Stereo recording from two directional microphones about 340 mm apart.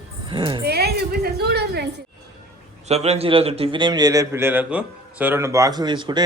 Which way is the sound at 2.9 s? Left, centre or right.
Centre.